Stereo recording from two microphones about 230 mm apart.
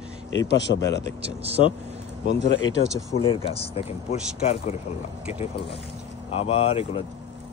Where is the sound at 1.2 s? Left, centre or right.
Right.